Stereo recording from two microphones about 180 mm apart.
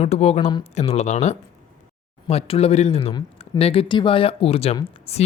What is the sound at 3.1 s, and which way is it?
Speech, 25° left (ahead or behind).